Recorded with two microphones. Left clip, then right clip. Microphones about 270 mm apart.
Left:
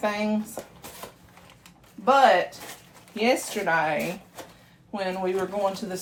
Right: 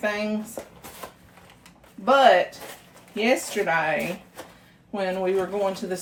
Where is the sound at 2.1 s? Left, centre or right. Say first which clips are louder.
Right 1 dB; centre.